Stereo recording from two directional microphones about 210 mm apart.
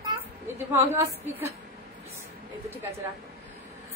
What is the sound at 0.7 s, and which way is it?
Speech, 10° right (ahead or behind).